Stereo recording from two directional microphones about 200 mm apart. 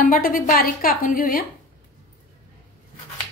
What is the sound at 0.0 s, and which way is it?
A woman's voice, 45° left (ahead or behind).